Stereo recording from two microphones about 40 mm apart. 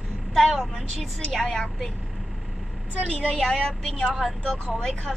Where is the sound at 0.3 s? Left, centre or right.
Centre.